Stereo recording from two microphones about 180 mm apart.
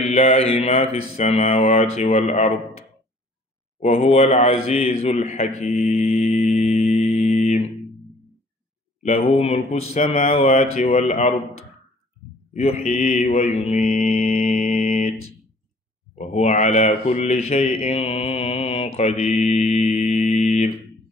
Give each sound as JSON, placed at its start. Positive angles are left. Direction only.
{"t": 0.0, "sound": "speech", "side_deg": 35}
{"t": 3.8, "sound": "a man's voice", "side_deg": 35}
{"t": 9.0, "sound": "speech", "side_deg": 35}
{"t": 12.5, "sound": "speech", "side_deg": 35}
{"t": 13.7, "sound": "mantra", "side_deg": 50}
{"t": 14.4, "sound": "mantra", "side_deg": 40}
{"t": 16.2, "sound": "speech", "side_deg": 40}
{"t": 17.9, "sound": "mantra", "side_deg": 35}